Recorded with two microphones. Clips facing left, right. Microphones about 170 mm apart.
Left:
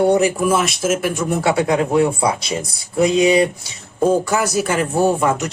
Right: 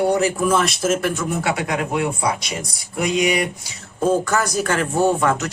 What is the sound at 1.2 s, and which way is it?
Speech, 30° left (ahead or behind).